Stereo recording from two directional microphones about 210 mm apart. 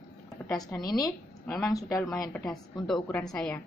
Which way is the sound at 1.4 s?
5° left (ahead or behind).